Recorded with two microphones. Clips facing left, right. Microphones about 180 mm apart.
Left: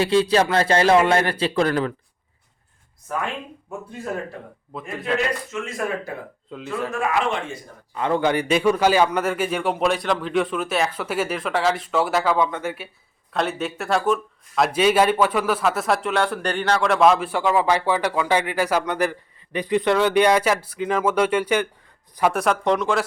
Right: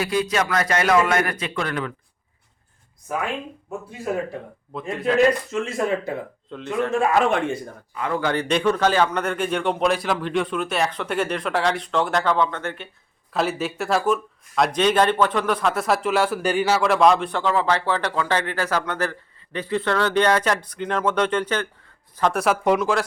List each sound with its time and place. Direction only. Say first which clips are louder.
0.0 s a man's voice: left 5 dB; 30° left (ahead or behind)
4.7 s speech: right 5 dB; centre (ahead or behind)
5.5 s speech: right 4 dB; 30° right (ahead or behind)
6.5 s speech: even; 5° left (ahead or behind)
7.1 s speech: right 4 dB; 50° right (ahead or behind)
7.9 s a man's voice: left 4 dB; 25° left (ahead or behind)
8.3 s speech: right 1 dB; 10° left (ahead or behind)
13.3 s speech: right 1 dB; centre (ahead or behind)
22.3 s speech: right 1 dB; centre (ahead or behind)